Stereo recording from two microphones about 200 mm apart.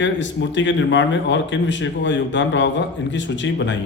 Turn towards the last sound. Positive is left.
turn(degrees=65)  # may be behind; listen again after turning